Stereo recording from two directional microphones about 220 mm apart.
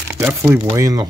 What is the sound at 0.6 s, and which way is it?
Speech, 15° right (ahead or behind).